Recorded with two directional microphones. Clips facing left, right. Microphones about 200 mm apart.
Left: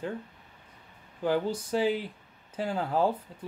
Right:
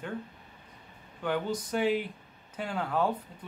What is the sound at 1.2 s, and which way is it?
Speech, 30° left (ahead or behind).